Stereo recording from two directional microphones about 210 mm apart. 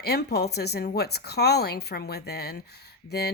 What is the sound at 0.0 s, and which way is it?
Speech, 50° left (ahead or behind).